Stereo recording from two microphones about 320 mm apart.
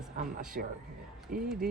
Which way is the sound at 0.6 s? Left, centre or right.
Right.